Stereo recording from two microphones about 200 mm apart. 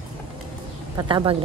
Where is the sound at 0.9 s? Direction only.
25° right (ahead or behind).